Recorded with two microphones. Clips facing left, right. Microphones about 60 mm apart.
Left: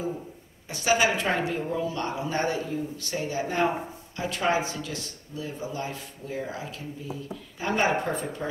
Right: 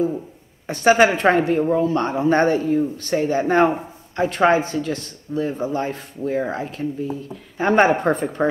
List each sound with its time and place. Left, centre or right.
0.7 s a man's voice: right